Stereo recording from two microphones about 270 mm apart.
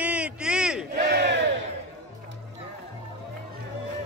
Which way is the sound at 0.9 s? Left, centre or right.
Right.